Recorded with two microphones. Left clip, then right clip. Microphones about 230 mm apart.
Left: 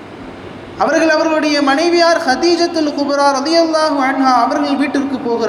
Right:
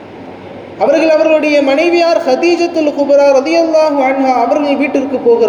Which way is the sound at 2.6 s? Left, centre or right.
Left.